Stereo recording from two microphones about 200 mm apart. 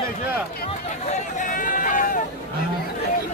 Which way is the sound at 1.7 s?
40° left (ahead or behind).